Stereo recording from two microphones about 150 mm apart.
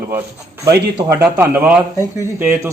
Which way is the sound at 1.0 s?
15° right (ahead or behind).